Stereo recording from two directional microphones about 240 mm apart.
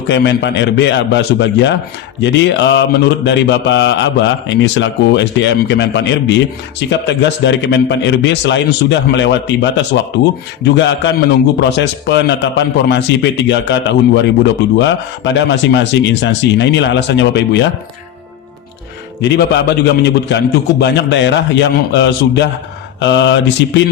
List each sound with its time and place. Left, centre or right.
0.1 s mantra: left
19.2 s mantra: left